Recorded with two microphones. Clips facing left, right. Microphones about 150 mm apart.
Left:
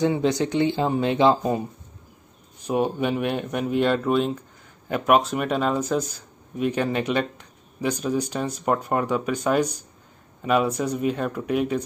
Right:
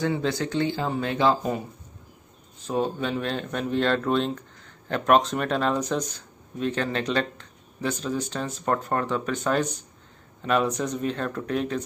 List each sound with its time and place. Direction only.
0.0 s speech: 20° left (ahead or behind)
2.6 s speech: 15° left (ahead or behind)